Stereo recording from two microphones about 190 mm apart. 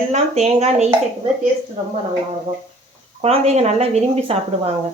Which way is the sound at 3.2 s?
35° right (ahead or behind).